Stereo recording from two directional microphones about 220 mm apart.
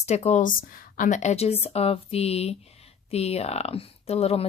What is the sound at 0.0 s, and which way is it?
Speech, 30° left (ahead or behind).